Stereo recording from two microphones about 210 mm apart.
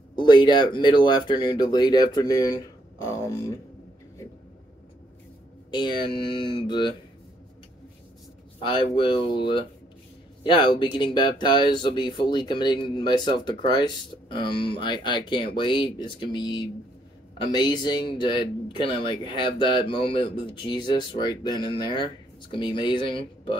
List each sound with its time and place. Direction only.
0.1 s speech: 20° left (ahead or behind)
5.7 s speech: 20° left (ahead or behind)
8.5 s speech: 20° left (ahead or behind)